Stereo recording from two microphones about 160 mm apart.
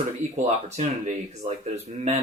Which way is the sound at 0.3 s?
45° right (ahead or behind).